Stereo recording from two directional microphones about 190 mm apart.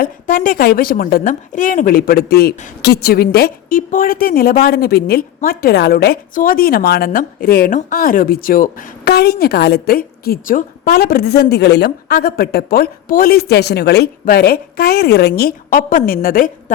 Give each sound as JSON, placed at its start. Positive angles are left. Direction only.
{"t": 0.0, "sound": "a woman's voice", "side_deg": 45}